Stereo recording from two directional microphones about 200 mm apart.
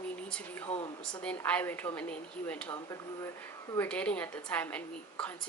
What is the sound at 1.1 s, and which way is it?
Speech, 10° left (ahead or behind).